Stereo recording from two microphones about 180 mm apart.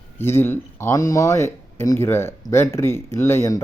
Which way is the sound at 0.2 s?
15° left (ahead or behind).